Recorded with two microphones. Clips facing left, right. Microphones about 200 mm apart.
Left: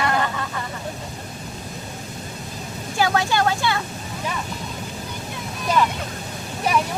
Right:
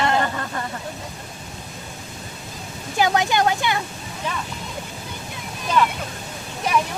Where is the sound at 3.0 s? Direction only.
20° right (ahead or behind).